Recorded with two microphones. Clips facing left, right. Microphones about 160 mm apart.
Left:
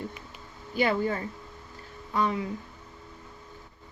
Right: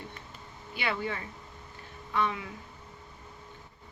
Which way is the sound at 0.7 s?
40° left (ahead or behind).